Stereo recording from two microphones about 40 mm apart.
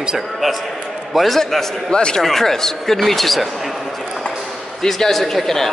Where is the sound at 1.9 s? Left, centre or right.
Left.